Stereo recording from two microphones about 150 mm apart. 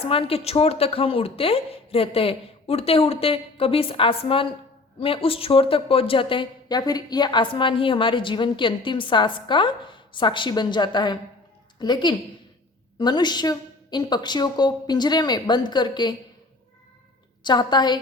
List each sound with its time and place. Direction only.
0.0 s a woman's voice: 40° left (ahead or behind)
17.4 s a woman's voice: 30° left (ahead or behind)